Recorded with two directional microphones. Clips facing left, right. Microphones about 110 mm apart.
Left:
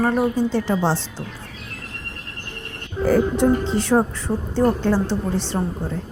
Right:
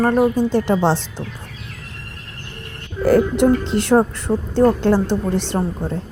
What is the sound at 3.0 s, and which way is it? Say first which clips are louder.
A woman's voice: right 3 dB; 70° right (ahead or behind).